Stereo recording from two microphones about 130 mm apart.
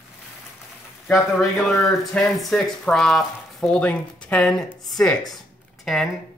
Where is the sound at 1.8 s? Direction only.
Centre (ahead or behind).